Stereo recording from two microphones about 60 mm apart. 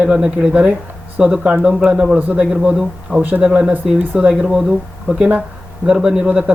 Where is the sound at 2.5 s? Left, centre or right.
Centre.